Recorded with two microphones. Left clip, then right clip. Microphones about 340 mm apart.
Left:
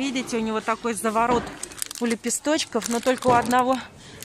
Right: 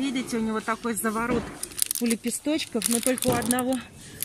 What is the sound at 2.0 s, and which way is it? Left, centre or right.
Speech, left.